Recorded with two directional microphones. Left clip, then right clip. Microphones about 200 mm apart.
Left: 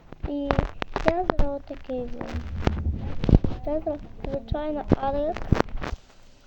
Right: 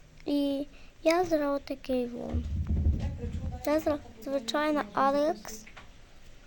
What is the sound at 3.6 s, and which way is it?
A woman's voice, 15° right (ahead or behind).